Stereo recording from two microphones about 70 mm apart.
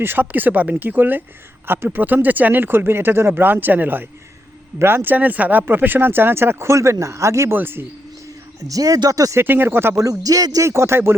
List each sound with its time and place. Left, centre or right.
0.0 s speech: right
7.5 s speech: right
8.6 s speech: right
9.3 s speech: right
10.0 s speech: right
10.7 s speech: right